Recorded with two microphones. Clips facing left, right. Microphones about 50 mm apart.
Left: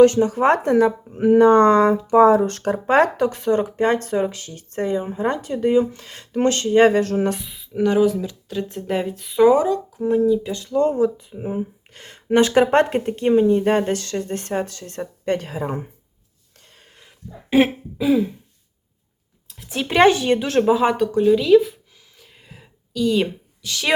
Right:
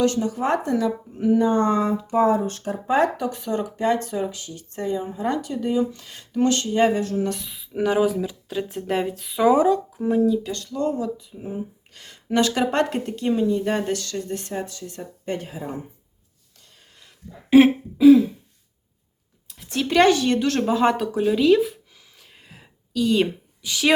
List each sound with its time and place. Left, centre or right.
0.0 s speech: left
1.4 s speech: left
6.9 s speech: left
7.4 s speech: centre
10.8 s speech: left
16.9 s a sound: left
17.5 s speech: centre
19.6 s speech: centre
22.2 s a sound: centre
23.6 s speech: centre